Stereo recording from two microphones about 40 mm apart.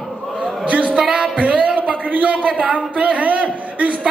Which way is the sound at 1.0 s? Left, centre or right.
Right.